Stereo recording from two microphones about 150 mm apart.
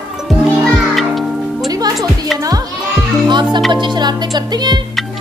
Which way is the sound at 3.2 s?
30° right (ahead or behind).